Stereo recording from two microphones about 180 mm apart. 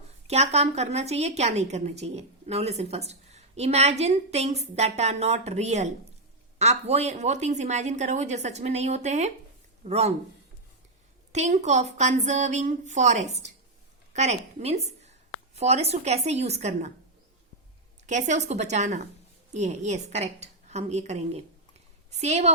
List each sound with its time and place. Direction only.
0.3 s a woman's voice: 35° right (ahead or behind)
11.3 s a woman's voice: 40° right (ahead or behind)
18.0 s a woman's voice: 40° right (ahead or behind)